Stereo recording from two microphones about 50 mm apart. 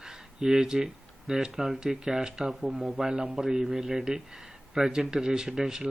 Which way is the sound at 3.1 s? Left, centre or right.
Right.